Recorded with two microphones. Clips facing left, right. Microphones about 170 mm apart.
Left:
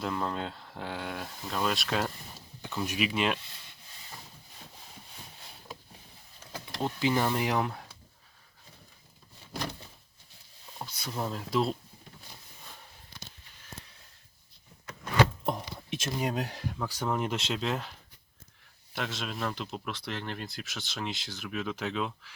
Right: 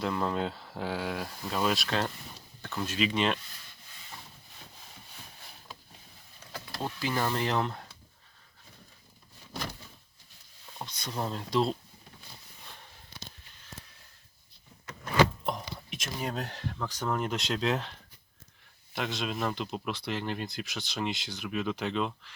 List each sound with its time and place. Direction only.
0.0 s speech: centre (ahead or behind)
2.6 s speech: 15° left (ahead or behind)
6.7 s speech: 20° left (ahead or behind)
10.8 s a sound: 10° left (ahead or behind)
11.2 s speech: centre (ahead or behind)
15.4 s a sound: 25° left (ahead or behind)
16.2 s speech: 10° left (ahead or behind)
18.9 s speech: centre (ahead or behind)